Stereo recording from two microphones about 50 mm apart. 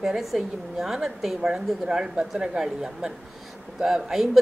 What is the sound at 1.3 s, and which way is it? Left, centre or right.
A woman's voice, centre.